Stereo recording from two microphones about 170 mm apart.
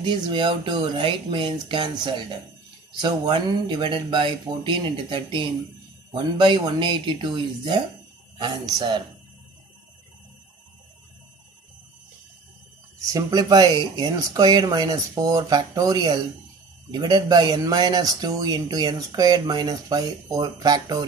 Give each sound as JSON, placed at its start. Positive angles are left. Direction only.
{"t": 0.0, "sound": "speech", "side_deg": -25}
{"t": 13.0, "sound": "speech", "side_deg": -20}